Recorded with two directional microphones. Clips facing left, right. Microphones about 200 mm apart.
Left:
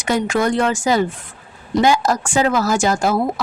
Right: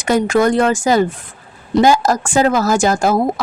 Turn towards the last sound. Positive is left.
turn(degrees=-45)  # may be behind; listen again after turning